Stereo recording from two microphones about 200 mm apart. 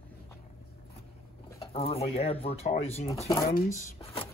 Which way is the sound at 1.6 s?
30° left (ahead or behind).